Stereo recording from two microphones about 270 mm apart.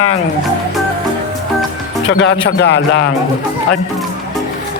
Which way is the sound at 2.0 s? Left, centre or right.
Left.